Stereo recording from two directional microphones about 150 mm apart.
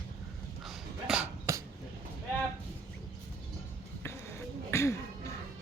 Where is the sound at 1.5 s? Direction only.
20° right (ahead or behind).